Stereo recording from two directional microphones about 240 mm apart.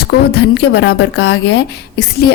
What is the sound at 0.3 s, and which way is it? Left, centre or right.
A woman's voice, left.